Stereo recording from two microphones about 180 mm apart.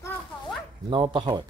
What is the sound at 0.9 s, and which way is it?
Speech, 30° right (ahead or behind).